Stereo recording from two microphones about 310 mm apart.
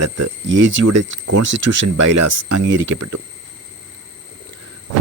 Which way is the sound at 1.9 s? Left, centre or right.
Right.